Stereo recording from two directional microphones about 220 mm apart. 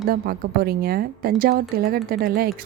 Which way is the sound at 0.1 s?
45° right (ahead or behind).